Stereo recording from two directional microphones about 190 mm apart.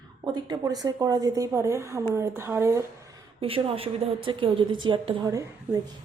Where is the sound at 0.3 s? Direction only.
20° right (ahead or behind).